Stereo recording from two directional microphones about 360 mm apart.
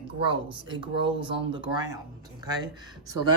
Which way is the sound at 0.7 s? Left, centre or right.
Centre.